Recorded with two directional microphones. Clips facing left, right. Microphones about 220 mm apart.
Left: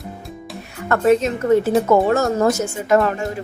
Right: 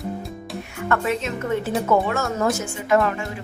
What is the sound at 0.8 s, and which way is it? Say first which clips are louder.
A woman's voice: left 8 dB; 40° left (ahead or behind).